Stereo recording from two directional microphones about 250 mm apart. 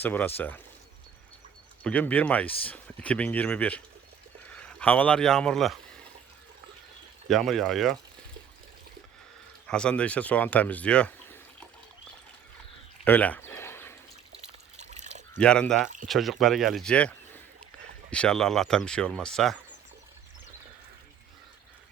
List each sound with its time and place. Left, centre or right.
0.0 s speech: centre
1.8 s speech: centre
7.3 s speech: centre
9.6 s speech: centre
13.1 s a sound: centre
14.8 s water: right
15.4 s speech: centre